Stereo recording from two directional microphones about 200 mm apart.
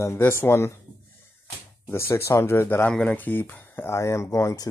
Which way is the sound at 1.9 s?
10° left (ahead or behind).